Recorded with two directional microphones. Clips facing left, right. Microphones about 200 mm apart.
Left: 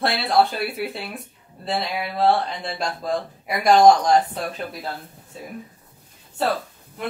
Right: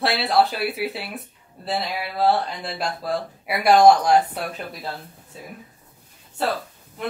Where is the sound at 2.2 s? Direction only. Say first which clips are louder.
Left 1 dB; 5° right (ahead or behind).